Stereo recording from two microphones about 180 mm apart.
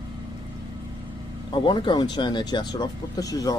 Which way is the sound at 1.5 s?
25° left (ahead or behind).